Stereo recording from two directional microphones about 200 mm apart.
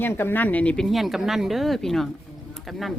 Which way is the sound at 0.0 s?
10° left (ahead or behind).